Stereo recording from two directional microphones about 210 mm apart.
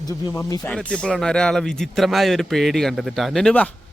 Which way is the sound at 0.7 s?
5° left (ahead or behind).